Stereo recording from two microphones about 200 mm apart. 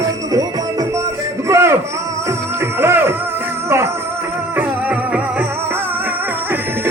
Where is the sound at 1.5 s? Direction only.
15° right (ahead or behind).